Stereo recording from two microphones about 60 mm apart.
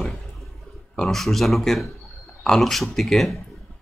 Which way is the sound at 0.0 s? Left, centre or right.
Centre.